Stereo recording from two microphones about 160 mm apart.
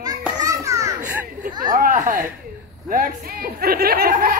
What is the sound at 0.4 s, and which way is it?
Children playing, 20° right (ahead or behind).